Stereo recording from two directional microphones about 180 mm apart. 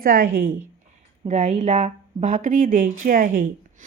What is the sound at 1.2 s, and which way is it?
A woman's voice, 40° right (ahead or behind).